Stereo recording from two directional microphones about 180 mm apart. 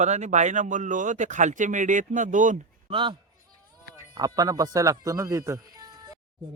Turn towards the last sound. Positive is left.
turn(degrees=-20)  # may be behind; listen again after turning